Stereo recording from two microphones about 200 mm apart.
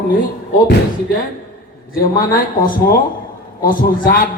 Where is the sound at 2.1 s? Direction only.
45° left (ahead or behind).